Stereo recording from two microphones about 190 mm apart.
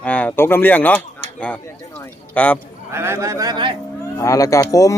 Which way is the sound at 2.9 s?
15° right (ahead or behind).